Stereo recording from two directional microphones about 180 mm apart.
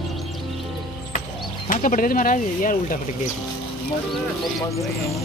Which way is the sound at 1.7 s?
50° left (ahead or behind).